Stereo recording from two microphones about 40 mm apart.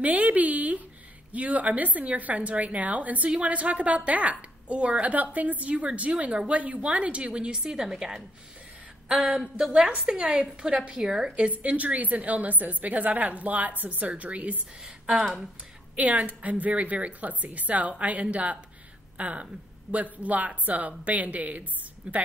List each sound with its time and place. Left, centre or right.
0.0 s a woman's voice: right; by 8.2 s centre
9.8 s a woman's voice: centre
11.5 s a woman's voice: right
15.0 s a woman's voice: centre
16.0 s a woman's voice: right